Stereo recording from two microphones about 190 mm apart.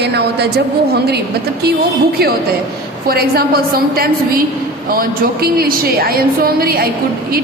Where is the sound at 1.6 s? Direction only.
55° right (ahead or behind).